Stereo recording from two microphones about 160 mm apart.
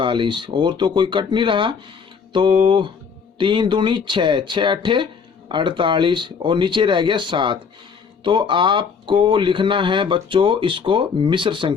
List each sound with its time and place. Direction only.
0.0 s speech: 30° right (ahead or behind)